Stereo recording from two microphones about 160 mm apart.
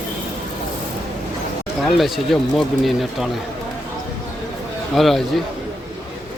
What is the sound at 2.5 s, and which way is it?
Speech, centre (ahead or behind).